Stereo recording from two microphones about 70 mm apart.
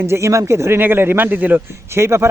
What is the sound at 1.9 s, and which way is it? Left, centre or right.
Speech, right.